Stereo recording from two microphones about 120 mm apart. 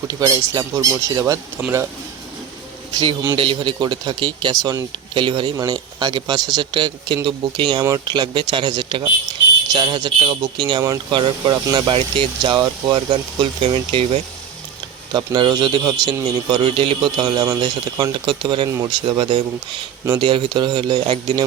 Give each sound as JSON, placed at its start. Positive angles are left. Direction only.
{"t": 0.1, "sound": "speech", "side_deg": -35}
{"t": 2.9, "sound": "speech", "side_deg": -40}
{"t": 5.1, "sound": "speech", "side_deg": -45}
{"t": 5.5, "sound": "speech", "side_deg": -30}
{"t": 13.6, "sound": "speech", "side_deg": -55}
{"t": 15.1, "sound": "speech", "side_deg": -40}